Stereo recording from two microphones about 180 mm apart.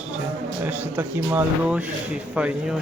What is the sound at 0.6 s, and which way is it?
Speech, 10° right (ahead or behind).